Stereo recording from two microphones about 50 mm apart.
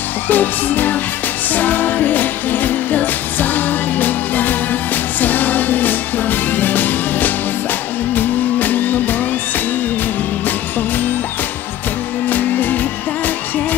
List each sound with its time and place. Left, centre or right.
0.3 s music: left
12.3 s music: left